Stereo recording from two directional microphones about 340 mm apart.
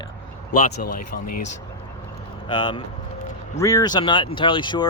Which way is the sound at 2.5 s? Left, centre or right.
Centre.